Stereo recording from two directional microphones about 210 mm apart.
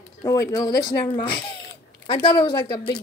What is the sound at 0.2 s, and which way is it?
Speech, 15° left (ahead or behind).